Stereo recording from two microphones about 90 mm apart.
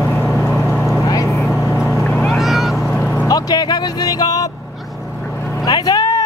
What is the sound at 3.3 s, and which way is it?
Music, 50° left (ahead or behind).